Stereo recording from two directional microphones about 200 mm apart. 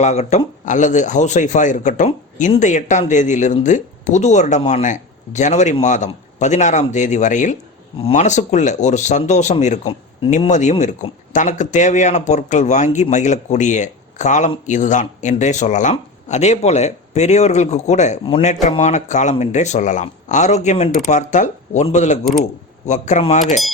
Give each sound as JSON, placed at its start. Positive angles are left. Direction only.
{"t": 0.0, "sound": "speech", "side_deg": 35}